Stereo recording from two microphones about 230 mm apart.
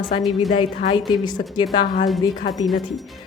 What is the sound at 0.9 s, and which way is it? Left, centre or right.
Speech, centre.